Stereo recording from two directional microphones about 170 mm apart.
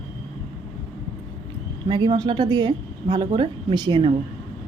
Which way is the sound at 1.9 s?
25° right (ahead or behind).